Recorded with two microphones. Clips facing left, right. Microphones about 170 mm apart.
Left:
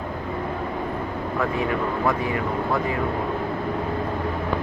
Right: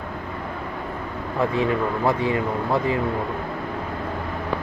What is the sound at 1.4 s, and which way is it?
Speech, 25° right (ahead or behind).